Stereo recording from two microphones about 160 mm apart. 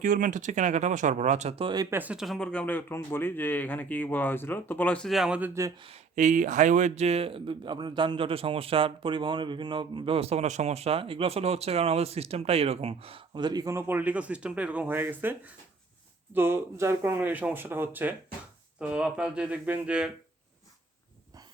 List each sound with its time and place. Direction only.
0.0 s speech: 55° right (ahead or behind); by 1.9 s 30° right (ahead or behind)
1.9 s speech: 10° right (ahead or behind)
6.1 s speech: 50° right (ahead or behind); by 20.1 s 5° right (ahead or behind)